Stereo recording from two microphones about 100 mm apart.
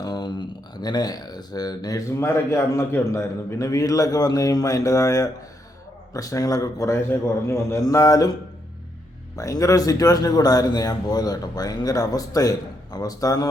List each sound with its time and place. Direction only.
0.0 s a sound: 45° left (ahead or behind)
2.2 s a man's voice: 30° left (ahead or behind)
9.3 s a man's voice: 35° left (ahead or behind)